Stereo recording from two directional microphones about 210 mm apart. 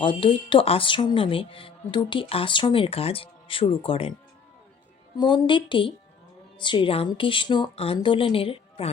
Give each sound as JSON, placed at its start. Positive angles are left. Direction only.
{"t": 0.0, "sound": "speech", "side_deg": 25}
{"t": 5.1, "sound": "speech", "side_deg": 20}